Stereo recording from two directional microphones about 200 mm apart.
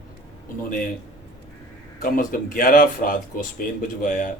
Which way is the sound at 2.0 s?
45° left (ahead or behind).